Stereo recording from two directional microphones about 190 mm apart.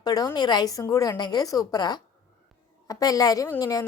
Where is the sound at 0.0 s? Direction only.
20° left (ahead or behind).